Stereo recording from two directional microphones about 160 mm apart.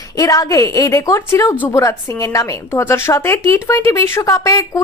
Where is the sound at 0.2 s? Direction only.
20° left (ahead or behind).